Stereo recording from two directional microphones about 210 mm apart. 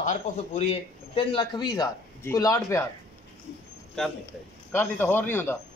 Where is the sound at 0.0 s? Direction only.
35° left (ahead or behind); by 2.8 s 15° left (ahead or behind).